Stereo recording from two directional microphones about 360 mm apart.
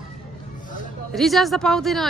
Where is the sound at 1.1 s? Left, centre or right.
Centre.